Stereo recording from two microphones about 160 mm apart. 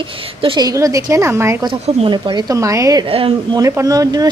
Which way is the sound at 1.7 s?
30° right (ahead or behind).